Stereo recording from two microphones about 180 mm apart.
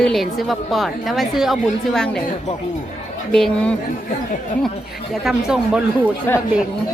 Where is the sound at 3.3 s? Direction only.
5° left (ahead or behind).